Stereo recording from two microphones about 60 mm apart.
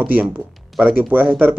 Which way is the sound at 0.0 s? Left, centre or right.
Right.